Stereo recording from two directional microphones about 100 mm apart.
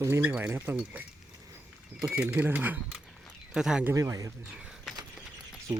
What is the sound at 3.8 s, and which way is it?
Speech, 30° right (ahead or behind).